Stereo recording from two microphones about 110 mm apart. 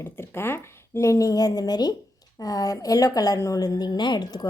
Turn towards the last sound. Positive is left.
turn(degrees=40)  # may be behind; listen again after turning